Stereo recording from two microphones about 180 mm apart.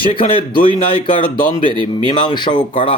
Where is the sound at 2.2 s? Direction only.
25° left (ahead or behind).